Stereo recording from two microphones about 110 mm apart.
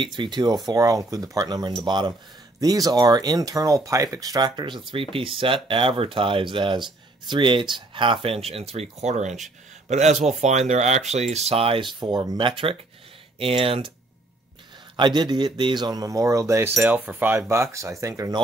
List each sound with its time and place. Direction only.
0.0 s speech: 45° right (ahead or behind)
15.0 s speech: 45° right (ahead or behind); by 16.7 s 25° right (ahead or behind)
16.8 s cutlery: 15° right (ahead or behind)